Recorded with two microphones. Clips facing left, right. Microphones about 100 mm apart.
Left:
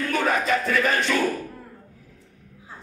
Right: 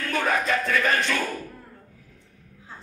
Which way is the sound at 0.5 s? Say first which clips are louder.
Left 1 dB; 15° left (ahead or behind).